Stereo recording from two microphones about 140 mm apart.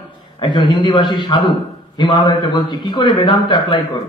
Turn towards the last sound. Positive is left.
turn(degrees=35)  # may be behind; listen again after turning